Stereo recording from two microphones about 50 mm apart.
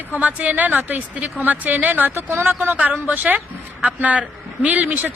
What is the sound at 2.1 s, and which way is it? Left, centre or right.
Speech, right.